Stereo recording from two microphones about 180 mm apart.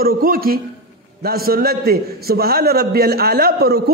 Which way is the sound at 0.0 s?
55° right (ahead or behind).